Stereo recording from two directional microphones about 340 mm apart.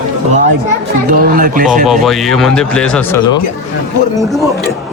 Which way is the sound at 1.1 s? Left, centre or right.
Right.